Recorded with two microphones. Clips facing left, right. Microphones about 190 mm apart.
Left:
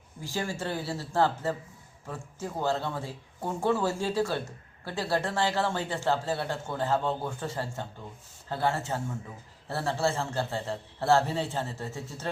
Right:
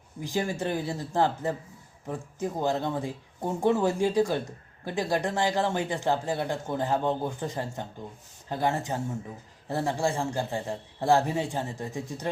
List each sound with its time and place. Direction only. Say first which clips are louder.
0.2 s speech: right 4 dB; 15° right (ahead or behind)